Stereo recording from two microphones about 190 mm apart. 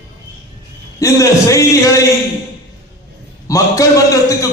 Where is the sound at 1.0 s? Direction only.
15° left (ahead or behind).